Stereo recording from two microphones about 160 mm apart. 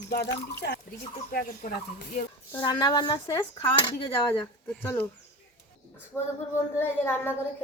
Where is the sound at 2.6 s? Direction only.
25° left (ahead or behind).